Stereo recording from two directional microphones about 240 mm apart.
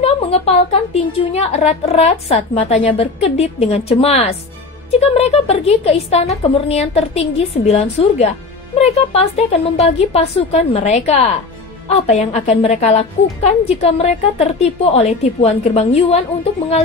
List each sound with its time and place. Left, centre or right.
0.0 s a woman's voice: left